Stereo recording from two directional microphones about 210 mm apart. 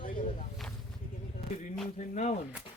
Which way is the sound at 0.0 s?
40° left (ahead or behind).